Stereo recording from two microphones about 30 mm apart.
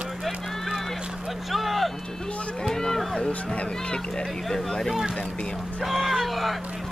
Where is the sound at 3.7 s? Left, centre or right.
Left.